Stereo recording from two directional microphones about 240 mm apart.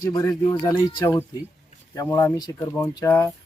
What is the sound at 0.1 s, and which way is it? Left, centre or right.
Speech, centre.